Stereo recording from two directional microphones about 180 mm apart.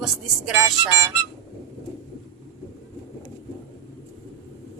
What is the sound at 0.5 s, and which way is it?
Music, 15° right (ahead or behind).